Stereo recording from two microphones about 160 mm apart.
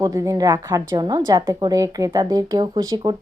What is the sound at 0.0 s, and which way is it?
Speech, 20° right (ahead or behind).